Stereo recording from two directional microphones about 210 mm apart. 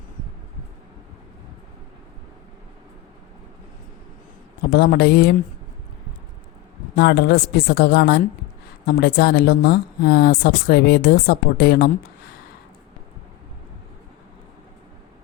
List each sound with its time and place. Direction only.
4.7 s speech: 50° left (ahead or behind)
6.9 s speech: 50° left (ahead or behind)